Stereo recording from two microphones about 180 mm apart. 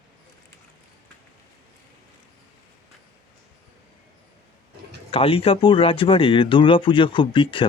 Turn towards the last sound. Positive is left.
turn(degrees=30)  # may be behind; listen again after turning